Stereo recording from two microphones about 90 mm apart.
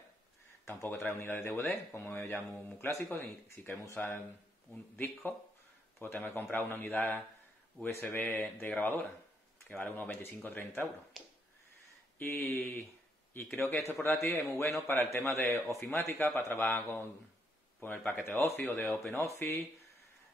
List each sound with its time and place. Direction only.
0.7 s a man's voice: 30° left (ahead or behind)
12.4 s a man's voice: 30° left (ahead or behind)